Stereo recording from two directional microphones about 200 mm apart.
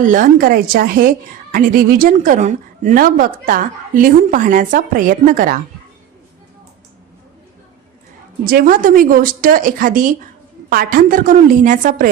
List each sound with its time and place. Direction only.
0.0 s a woman's voice: 40° right (ahead or behind)
8.4 s speech: 45° right (ahead or behind)